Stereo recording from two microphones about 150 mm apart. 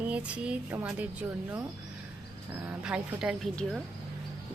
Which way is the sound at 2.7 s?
5° right (ahead or behind).